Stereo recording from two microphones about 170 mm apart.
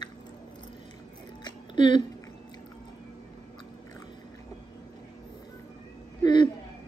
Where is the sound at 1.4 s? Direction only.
30° left (ahead or behind).